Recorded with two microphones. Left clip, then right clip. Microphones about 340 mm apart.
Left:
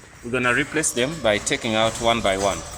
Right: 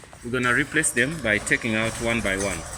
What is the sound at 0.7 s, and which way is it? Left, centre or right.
Speech, left.